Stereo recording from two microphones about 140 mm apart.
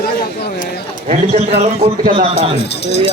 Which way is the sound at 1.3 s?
50° right (ahead or behind).